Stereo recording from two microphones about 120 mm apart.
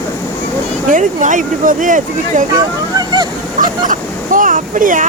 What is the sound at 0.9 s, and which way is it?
Speech, 90° right.